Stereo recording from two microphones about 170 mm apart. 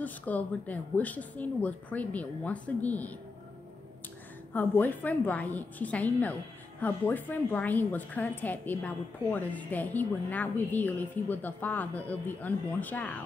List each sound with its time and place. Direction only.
0.0 s a woman's voice: 10° left (ahead or behind)
4.6 s a woman's voice: 10° left (ahead or behind)